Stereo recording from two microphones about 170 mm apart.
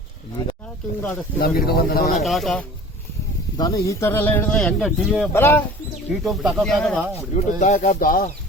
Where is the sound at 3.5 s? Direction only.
20° left (ahead or behind); by 5.3 s centre (ahead or behind).